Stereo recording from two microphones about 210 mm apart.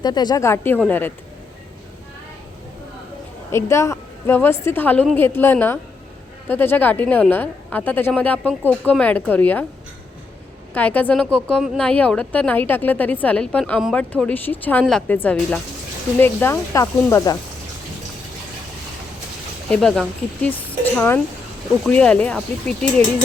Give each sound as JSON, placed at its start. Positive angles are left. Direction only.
{"t": 0.0, "sound": "speech", "side_deg": 20}
{"t": 3.5, "sound": "speech", "side_deg": 15}
{"t": 10.8, "sound": "speech", "side_deg": 10}
{"t": 19.7, "sound": "speech", "side_deg": 0}